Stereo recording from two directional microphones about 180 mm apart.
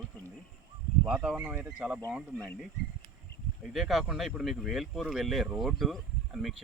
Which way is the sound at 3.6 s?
Centre (ahead or behind).